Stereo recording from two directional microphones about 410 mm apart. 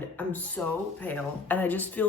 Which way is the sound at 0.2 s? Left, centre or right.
Centre.